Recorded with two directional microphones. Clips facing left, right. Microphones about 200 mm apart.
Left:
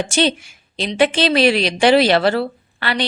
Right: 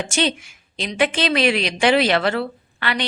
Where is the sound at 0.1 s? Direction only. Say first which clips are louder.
Left 4 dB; 30° left (ahead or behind).